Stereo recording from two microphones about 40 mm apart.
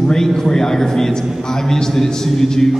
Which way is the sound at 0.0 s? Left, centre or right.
Centre.